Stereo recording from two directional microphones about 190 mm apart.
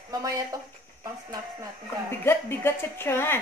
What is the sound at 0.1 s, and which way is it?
Speech, 20° right (ahead or behind).